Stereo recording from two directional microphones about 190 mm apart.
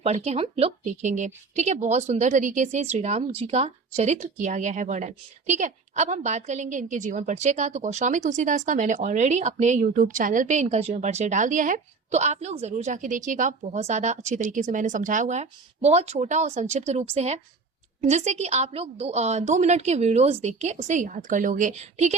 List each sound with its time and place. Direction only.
0.0 s a woman's voice: 35° right (ahead or behind)